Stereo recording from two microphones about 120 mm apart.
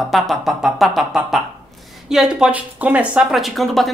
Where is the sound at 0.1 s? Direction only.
Centre (ahead or behind).